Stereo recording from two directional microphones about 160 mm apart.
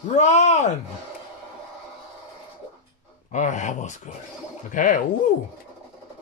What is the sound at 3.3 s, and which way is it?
A man's voice, 50° left (ahead or behind).